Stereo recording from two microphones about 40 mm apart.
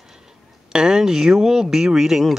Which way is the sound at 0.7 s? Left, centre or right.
Centre.